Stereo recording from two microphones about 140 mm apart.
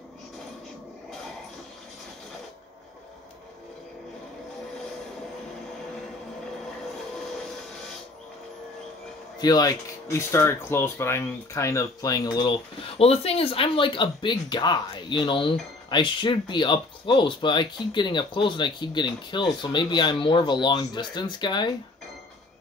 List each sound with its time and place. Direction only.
9.4 s speech: 25° left (ahead or behind)